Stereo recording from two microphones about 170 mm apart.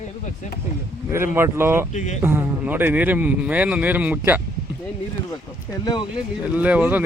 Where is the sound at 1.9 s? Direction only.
45° left (ahead or behind).